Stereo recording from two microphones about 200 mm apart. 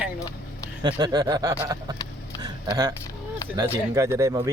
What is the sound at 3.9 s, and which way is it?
Speech, 15° right (ahead or behind).